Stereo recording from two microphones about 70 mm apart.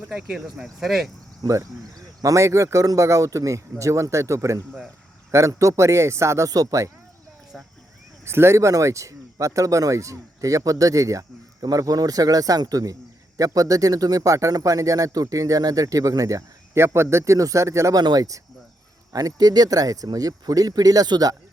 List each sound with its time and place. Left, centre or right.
0.1 s speech: centre
1.4 s speech: right
6.5 s a man's voice: right
7.5 s speech: centre
8.2 s a man's voice: right
17.9 s a man's voice: right